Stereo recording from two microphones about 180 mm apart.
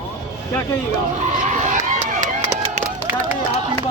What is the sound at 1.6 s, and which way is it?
Run, 45° right (ahead or behind).